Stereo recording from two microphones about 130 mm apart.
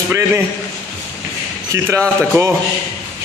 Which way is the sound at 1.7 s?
20° right (ahead or behind).